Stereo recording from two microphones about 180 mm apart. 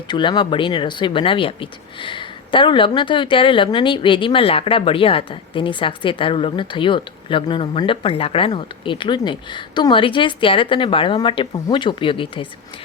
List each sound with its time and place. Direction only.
0.1 s speech: 25° left (ahead or behind)